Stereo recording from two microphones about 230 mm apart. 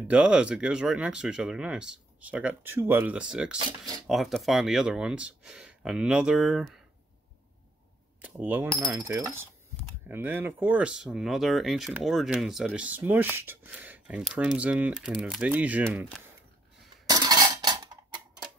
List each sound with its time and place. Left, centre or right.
0.1 s speech: centre
8.2 s coin: centre
10.0 s speech: centre
17.0 s a sound: centre